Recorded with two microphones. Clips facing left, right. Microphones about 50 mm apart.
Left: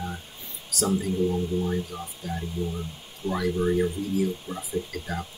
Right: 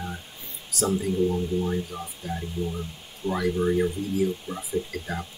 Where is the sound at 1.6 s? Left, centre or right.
Centre.